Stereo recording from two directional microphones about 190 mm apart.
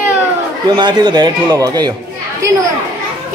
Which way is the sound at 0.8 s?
25° right (ahead or behind).